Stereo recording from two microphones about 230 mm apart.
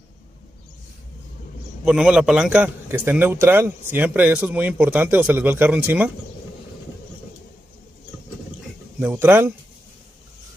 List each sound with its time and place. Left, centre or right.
1.9 s a man's voice: centre
9.0 s a man's voice: centre